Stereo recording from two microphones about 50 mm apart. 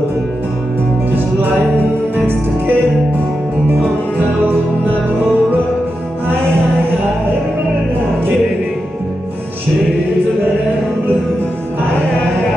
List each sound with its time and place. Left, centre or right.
2.1 s music: right